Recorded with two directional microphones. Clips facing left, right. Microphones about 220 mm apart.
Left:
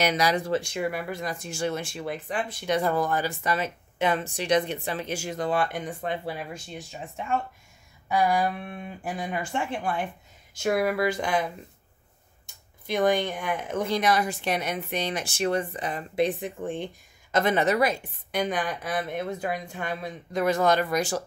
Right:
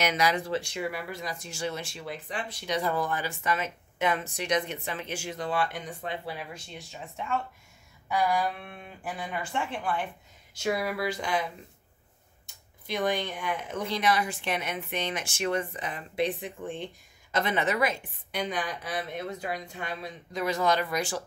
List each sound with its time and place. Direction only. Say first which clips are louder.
0.0 s speech: left 3 dB; 35° left (ahead or behind)
9.0 s speech: left 3 dB; 45° left (ahead or behind)
12.8 s speech: left 5 dB; 50° left (ahead or behind)